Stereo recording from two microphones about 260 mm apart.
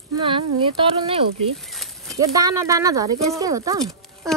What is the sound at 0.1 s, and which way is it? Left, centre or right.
Speech, centre.